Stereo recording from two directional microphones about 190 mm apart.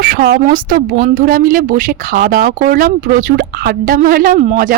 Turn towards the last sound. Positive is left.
turn(degrees=-45)  # may be behind; listen again after turning